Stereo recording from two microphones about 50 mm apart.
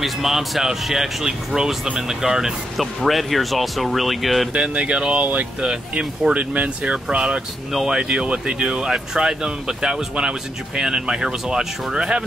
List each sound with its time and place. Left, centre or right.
0.0 s speech: centre
4.6 s speech: right